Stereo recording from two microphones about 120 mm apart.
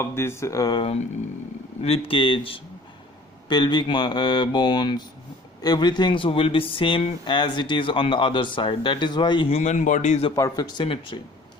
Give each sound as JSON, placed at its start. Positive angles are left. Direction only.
{"t": 0.0, "sound": "speech", "side_deg": 20}
{"t": 0.8, "sound": "speech", "side_deg": 55}
{"t": 9.5, "sound": "a man's voice", "side_deg": 70}
{"t": 10.3, "sound": "speech", "side_deg": 30}